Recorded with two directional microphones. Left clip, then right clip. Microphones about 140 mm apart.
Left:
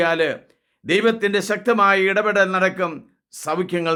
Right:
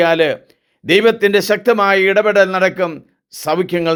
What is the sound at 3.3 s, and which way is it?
Speech, 30° right (ahead or behind).